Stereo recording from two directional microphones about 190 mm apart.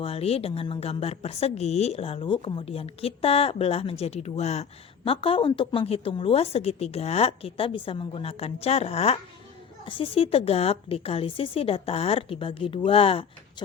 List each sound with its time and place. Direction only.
0.0 s a woman's voice: 30° left (ahead or behind)